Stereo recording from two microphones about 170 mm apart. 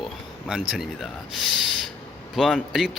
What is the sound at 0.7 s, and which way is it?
Speech, centre (ahead or behind).